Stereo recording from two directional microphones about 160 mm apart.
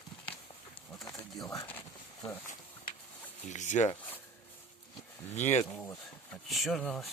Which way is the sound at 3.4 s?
50° left (ahead or behind).